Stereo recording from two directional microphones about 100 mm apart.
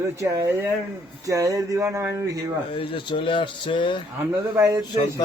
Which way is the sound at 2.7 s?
55° left (ahead or behind).